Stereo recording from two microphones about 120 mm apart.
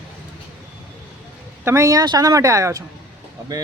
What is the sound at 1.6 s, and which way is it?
Speech, 25° right (ahead or behind).